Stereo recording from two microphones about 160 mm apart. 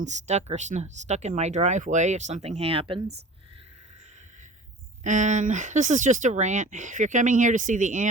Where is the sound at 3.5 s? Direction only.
40° right (ahead or behind).